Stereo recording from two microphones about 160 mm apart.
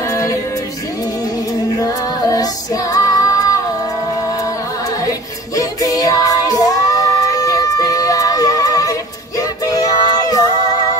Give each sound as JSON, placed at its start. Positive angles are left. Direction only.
{"t": 0.1, "sound": "music", "side_deg": 20}
{"t": 1.8, "sound": "female singing", "side_deg": 20}
{"t": 5.6, "sound": "music", "side_deg": 20}